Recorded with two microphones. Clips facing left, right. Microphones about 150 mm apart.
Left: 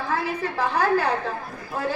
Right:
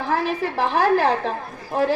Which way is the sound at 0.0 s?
85° right.